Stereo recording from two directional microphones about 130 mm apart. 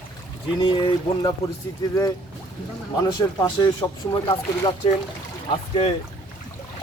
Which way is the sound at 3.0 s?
30° left (ahead or behind).